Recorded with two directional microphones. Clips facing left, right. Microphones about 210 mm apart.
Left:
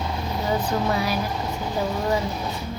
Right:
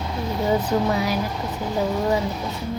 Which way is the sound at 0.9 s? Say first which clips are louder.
Right 2 dB; 20° right (ahead or behind).